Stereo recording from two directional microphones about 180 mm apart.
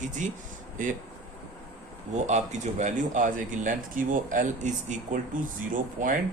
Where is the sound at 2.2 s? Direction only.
40° right (ahead or behind).